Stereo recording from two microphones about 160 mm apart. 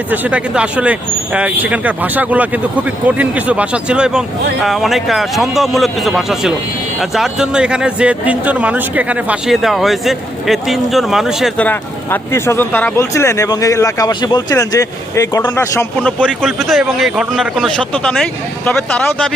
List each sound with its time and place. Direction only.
0.1 s speech: 10° right (ahead or behind)
11.6 s a man's voice: 10° left (ahead or behind)